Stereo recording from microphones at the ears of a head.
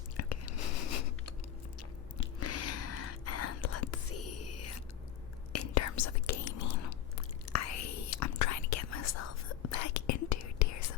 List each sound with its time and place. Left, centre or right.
0.2 s chewing: left
2.1 s whispering: left